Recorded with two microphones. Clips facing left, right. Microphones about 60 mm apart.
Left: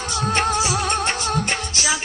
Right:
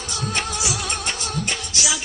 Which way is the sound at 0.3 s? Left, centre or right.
Left.